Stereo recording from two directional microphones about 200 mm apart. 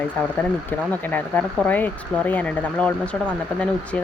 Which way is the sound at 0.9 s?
10° left (ahead or behind).